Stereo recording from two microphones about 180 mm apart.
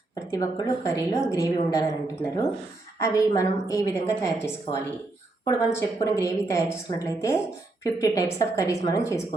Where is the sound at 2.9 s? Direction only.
15° left (ahead or behind).